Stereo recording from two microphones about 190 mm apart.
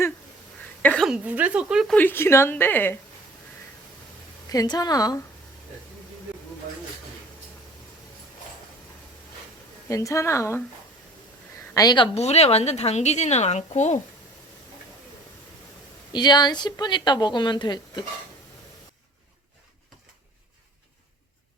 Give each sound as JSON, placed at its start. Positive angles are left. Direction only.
{"t": 0.8, "sound": "a sound", "side_deg": 10}
{"t": 1.0, "sound": "a woman's voice", "side_deg": -5}
{"t": 2.0, "sound": "a woman's voice", "side_deg": 10}
{"t": 4.4, "sound": "a woman's voice", "side_deg": 20}
{"t": 9.9, "sound": "a woman's voice", "side_deg": 15}
{"t": 11.7, "sound": "a woman's voice", "side_deg": 20}
{"t": 16.1, "sound": "a woman's voice", "side_deg": 20}